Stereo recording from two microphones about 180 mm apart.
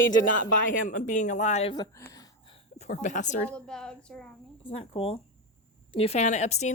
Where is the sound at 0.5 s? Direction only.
45° left (ahead or behind).